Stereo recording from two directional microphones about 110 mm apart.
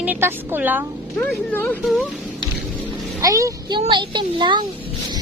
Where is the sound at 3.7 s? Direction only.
45° right (ahead or behind).